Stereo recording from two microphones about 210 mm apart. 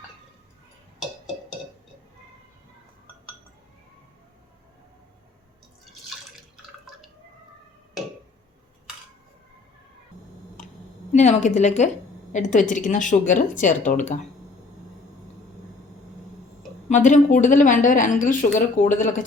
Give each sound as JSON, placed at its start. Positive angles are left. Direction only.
{"t": 11.1, "sound": "a woman's voice", "side_deg": 35}
{"t": 16.9, "sound": "a woman's voice", "side_deg": 35}